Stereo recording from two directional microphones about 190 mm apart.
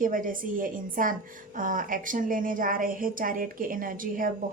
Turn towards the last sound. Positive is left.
turn(degrees=-45)  # may be behind; listen again after turning